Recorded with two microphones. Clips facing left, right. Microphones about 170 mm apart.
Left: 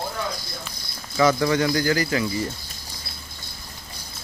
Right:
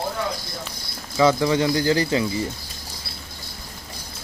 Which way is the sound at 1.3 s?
20° right (ahead or behind).